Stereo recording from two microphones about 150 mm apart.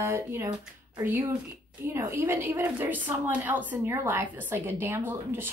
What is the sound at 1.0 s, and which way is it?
A woman's voice, 15° right (ahead or behind).